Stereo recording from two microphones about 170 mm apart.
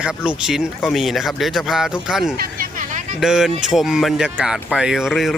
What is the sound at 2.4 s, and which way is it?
Hubbub, 55° right (ahead or behind).